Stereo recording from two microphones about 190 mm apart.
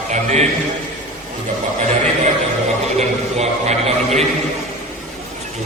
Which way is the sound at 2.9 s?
35° right (ahead or behind).